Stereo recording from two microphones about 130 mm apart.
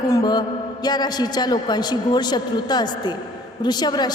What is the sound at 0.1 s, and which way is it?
A woman's voice, 30° left (ahead or behind).